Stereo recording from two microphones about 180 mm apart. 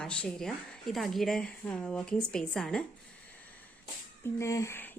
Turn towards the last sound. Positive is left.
turn(degrees=10)  # may be behind; listen again after turning